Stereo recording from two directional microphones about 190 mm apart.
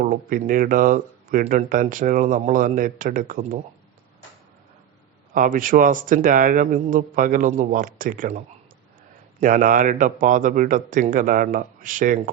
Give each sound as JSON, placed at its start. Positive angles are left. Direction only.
{"t": 0.0, "sound": "speech", "side_deg": -45}
{"t": 5.3, "sound": "speech", "side_deg": -45}
{"t": 9.4, "sound": "speech", "side_deg": -45}